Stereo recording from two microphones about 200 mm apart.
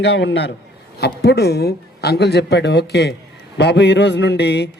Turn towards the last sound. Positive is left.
turn(degrees=60)  # may be behind; listen again after turning